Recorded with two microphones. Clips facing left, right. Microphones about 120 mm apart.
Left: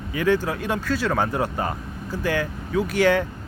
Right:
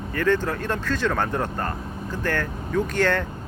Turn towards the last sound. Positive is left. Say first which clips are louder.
# left 3 dB
turn(degrees=10)  # may be behind; listen again after turning